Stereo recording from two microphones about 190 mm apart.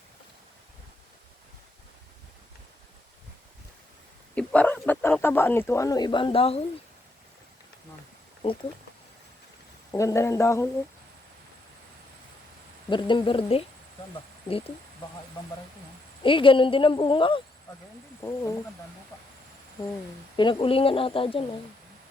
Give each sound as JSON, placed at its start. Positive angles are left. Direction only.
{"t": 4.4, "sound": "speech", "side_deg": 5}
{"t": 9.9, "sound": "speech", "side_deg": 15}
{"t": 12.9, "sound": "a woman's voice", "side_deg": 25}
{"t": 16.2, "sound": "a woman's voice", "side_deg": 25}
{"t": 18.2, "sound": "speech", "side_deg": 15}
{"t": 20.3, "sound": "a woman's voice", "side_deg": 25}